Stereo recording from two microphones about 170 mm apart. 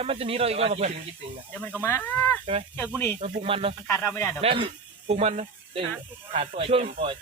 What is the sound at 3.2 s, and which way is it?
Speech, 35° right (ahead or behind).